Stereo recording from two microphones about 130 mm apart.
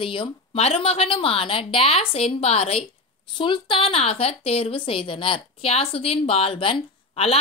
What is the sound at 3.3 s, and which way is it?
A woman's voice, 40° left (ahead or behind).